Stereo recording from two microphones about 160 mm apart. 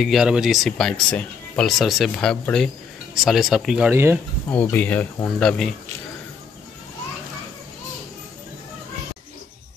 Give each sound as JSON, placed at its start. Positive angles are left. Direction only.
{"t": 0.0, "sound": "speech", "side_deg": -5}
{"t": 3.9, "sound": "speech", "side_deg": -15}
{"t": 4.5, "sound": "speech", "side_deg": 10}